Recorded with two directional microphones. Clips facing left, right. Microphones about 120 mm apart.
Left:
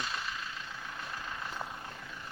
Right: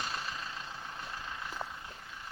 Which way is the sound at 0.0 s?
35° right (ahead or behind).